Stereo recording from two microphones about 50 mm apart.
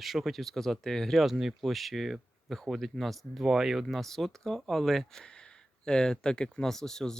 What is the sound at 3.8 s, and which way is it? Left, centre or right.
Speech, centre.